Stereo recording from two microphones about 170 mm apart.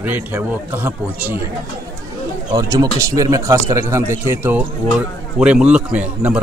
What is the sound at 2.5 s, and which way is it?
Speech, 20° right (ahead or behind).